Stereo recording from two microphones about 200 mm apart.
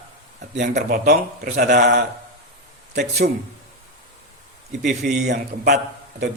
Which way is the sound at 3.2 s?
50° right (ahead or behind).